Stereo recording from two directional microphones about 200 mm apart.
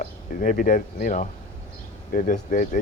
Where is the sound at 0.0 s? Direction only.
40° left (ahead or behind).